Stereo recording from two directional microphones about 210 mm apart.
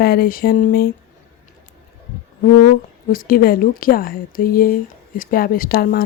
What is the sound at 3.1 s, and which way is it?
Speech, 45° left (ahead or behind).